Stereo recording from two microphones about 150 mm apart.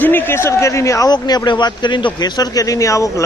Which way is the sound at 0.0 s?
15° left (ahead or behind).